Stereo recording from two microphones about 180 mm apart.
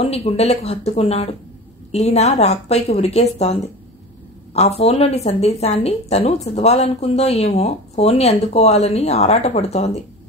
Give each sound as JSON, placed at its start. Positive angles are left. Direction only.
{"t": 0.0, "sound": "a woman's voice", "side_deg": 35}
{"t": 4.6, "sound": "a woman's voice", "side_deg": 35}